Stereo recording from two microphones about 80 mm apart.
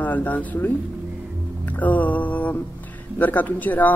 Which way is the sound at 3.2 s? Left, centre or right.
Left.